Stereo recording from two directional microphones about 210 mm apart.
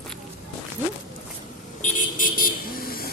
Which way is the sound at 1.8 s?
40° left (ahead or behind).